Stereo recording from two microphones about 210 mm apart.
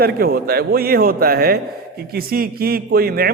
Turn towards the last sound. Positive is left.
turn(degrees=-45)  # may be behind; listen again after turning